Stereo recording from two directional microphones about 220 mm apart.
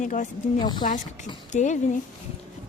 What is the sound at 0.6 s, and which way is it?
Speech, 20° left (ahead or behind).